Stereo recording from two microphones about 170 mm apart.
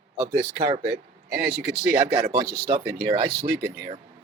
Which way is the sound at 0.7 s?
35° right (ahead or behind).